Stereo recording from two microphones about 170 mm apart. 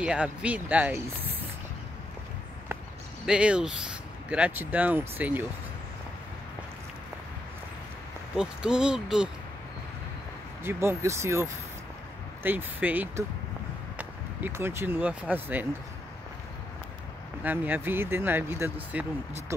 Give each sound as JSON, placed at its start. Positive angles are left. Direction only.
{"t": 0.0, "sound": "speech", "side_deg": -5}
{"t": 3.3, "sound": "speech", "side_deg": -5}
{"t": 8.4, "sound": "speech", "side_deg": -5}
{"t": 10.6, "sound": "speech", "side_deg": -15}
{"t": 17.4, "sound": "speech", "side_deg": -10}